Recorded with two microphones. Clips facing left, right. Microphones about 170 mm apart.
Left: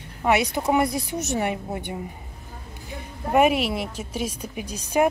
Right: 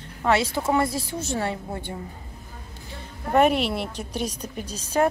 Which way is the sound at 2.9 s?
10° left (ahead or behind).